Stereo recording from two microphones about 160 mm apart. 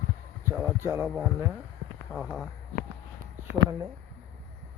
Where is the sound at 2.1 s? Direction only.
15° left (ahead or behind).